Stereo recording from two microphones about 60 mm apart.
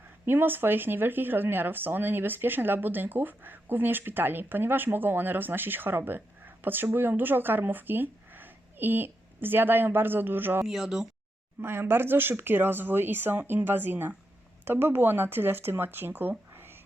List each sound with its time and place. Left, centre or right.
0.3 s speech: right
6.1 s a sound: right
6.9 s speech: right
10.7 s speech: centre
11.6 s speech: right
16.5 s a sound: right